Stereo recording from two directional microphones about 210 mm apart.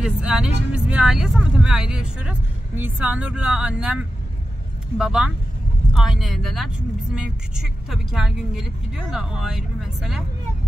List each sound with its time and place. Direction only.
0.0 s speech: 5° right (ahead or behind)